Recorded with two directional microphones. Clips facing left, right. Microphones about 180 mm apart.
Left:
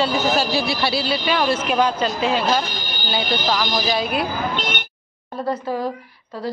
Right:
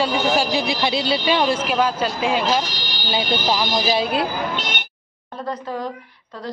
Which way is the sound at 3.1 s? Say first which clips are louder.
Right 1 dB; 20° right (ahead or behind).